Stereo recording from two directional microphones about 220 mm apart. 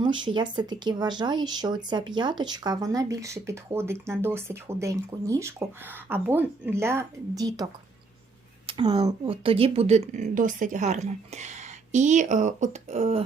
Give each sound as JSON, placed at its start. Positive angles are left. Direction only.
{"t": 0.0, "sound": "speech", "side_deg": -20}